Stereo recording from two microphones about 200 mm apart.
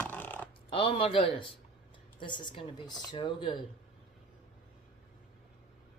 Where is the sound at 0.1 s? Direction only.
10° left (ahead or behind).